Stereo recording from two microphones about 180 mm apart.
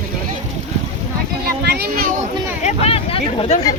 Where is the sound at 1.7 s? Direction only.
60° right (ahead or behind).